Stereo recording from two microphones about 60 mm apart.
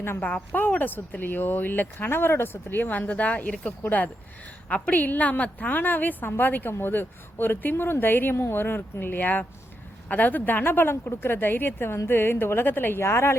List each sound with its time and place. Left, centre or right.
0.2 s a woman's voice: left